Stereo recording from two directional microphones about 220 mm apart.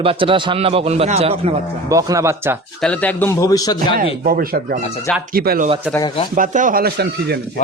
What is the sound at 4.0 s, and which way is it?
A man's voice, 40° right (ahead or behind).